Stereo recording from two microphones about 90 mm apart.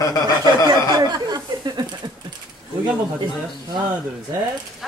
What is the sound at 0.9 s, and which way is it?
Speech, 45° right (ahead or behind).